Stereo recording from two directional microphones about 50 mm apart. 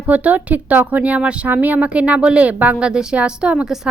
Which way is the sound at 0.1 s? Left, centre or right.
Right.